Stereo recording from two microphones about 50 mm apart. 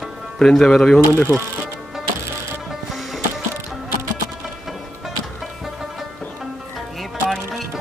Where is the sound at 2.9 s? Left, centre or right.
Centre.